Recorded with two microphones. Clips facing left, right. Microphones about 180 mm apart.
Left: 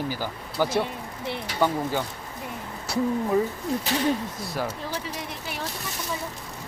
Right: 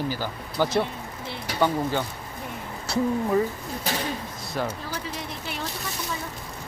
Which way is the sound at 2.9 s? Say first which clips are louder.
Right 1 dB; 15° left (ahead or behind).